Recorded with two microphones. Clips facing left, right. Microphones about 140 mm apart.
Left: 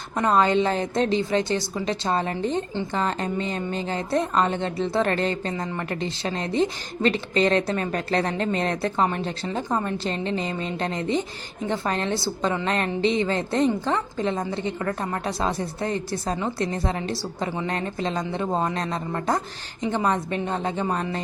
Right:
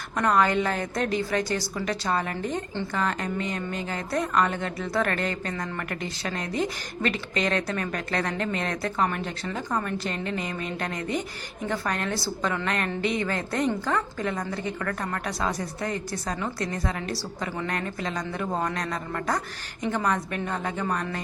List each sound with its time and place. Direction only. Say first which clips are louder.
0.2 s a woman's voice: left 3 dB; 25° left (ahead or behind)